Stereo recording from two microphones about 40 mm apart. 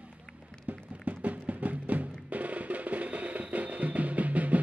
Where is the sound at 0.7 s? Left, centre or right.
Right.